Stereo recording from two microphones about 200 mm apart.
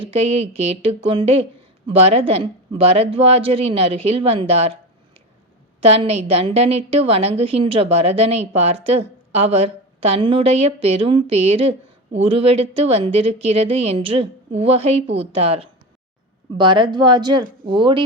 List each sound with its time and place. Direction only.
0.0 s a woman's voice: 30° right (ahead or behind)
5.8 s a woman's voice: 30° right (ahead or behind)